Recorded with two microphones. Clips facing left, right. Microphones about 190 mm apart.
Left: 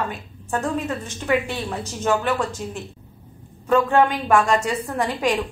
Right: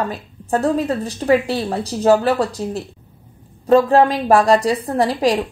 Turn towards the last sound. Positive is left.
turn(degrees=-35)  # may be behind; listen again after turning